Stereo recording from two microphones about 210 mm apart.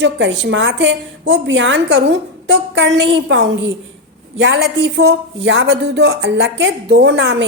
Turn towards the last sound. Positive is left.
turn(degrees=-55)  # may be behind; listen again after turning